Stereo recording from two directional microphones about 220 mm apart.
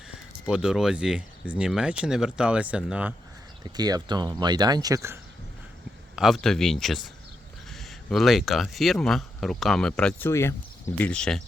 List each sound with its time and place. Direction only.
0.1 s speech: 5° right (ahead or behind)
3.6 s speech: 15° right (ahead or behind)
6.1 s speech: centre (ahead or behind)